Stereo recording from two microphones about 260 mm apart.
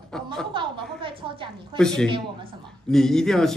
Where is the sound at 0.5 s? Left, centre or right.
Centre.